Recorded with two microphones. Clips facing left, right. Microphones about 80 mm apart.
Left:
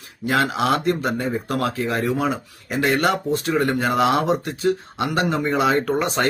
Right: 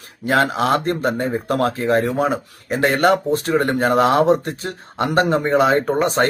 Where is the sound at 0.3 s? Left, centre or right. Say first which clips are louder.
Right 3 dB; right.